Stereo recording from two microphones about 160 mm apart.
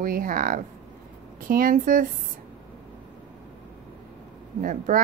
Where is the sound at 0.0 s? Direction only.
60° right (ahead or behind).